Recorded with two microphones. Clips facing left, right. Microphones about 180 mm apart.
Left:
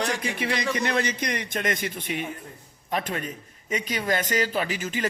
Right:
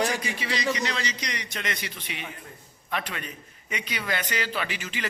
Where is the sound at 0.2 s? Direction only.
55° left (ahead or behind).